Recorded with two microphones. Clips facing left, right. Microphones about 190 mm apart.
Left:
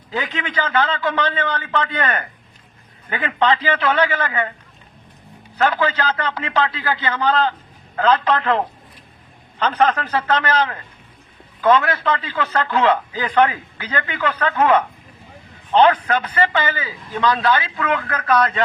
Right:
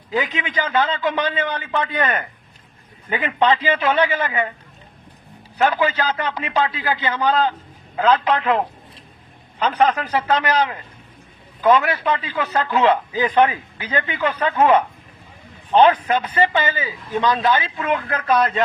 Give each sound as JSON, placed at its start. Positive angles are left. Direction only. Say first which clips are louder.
{"t": 0.1, "sound": "a man's voice", "louder": "right 2 dB", "side_deg": -15}
{"t": 5.5, "sound": "a man's voice", "louder": "even", "side_deg": -15}